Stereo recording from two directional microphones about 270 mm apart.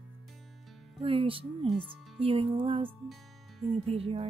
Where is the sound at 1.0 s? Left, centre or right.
Centre.